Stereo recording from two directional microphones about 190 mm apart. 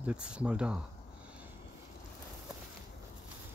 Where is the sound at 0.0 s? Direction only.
5° right (ahead or behind).